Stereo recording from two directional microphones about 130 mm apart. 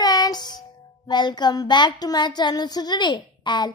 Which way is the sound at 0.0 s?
30° left (ahead or behind).